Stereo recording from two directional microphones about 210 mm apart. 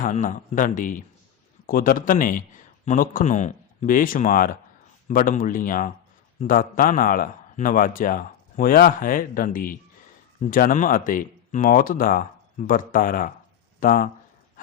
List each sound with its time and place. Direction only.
0.0 s a man's voice: 40° left (ahead or behind)